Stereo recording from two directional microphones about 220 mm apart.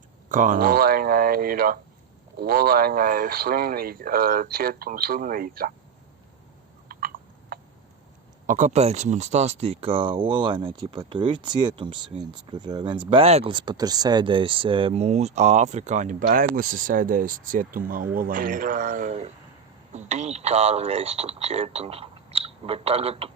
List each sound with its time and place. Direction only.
0.3 s speech: 35° right (ahead or behind)
6.8 s a sound: 40° right (ahead or behind)
8.4 s speech: 35° right (ahead or behind)